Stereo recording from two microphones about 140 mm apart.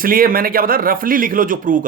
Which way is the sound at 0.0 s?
90° right.